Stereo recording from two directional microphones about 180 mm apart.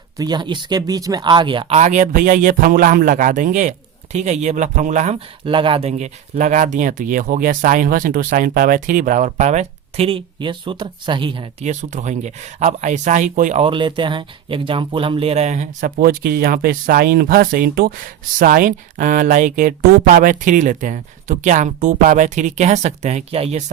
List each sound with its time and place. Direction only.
0.2 s speech: 25° right (ahead or behind)
1.8 s speech: 40° right (ahead or behind)
5.5 s speech: 30° right (ahead or behind)
11.7 s speech: 40° right (ahead or behind)
13.6 s speech: 30° right (ahead or behind)